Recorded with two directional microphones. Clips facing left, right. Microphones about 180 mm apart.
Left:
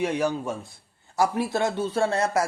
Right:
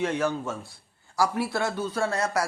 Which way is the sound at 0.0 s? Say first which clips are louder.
Left 1 dB; 15° left (ahead or behind).